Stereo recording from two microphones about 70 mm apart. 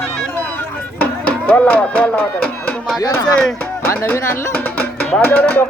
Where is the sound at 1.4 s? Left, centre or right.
Left.